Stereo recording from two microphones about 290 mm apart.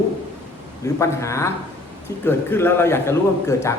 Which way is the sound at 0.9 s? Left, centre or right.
Centre.